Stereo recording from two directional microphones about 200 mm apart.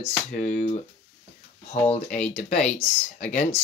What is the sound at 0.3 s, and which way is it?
Speech, 40° left (ahead or behind).